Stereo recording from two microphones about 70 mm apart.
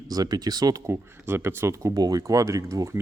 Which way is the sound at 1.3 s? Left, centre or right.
Right.